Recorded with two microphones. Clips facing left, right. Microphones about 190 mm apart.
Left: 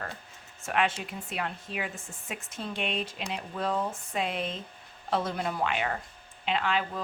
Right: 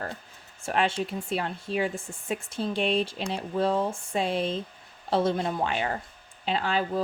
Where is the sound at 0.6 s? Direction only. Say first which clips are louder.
Right 3 dB; 30° right (ahead or behind).